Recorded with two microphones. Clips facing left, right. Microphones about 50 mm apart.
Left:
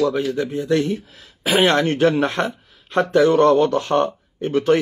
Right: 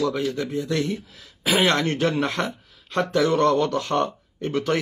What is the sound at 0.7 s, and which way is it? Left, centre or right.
Speech, left.